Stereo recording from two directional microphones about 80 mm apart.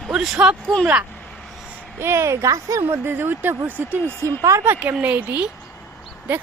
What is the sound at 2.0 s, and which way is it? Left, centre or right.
Speech, right.